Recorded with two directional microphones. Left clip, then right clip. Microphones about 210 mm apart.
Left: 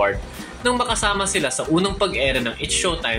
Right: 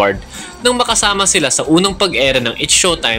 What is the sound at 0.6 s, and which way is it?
Speech, 45° right (ahead or behind).